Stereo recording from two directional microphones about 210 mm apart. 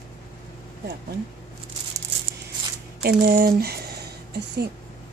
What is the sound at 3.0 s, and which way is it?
Speech, 45° right (ahead or behind).